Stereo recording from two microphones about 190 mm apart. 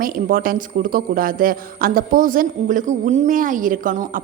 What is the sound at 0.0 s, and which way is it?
A man's voice, 50° right (ahead or behind).